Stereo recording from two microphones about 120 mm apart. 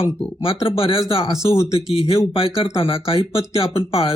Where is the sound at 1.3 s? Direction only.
25° left (ahead or behind).